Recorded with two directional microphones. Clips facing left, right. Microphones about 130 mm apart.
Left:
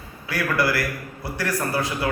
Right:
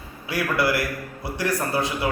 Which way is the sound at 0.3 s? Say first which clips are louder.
Even; 20° right (ahead or behind).